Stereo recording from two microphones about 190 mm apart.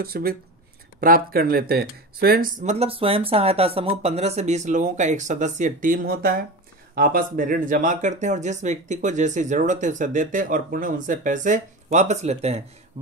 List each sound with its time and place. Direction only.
0.0 s speech: 55° right (ahead or behind); by 13.1 s 35° right (ahead or behind)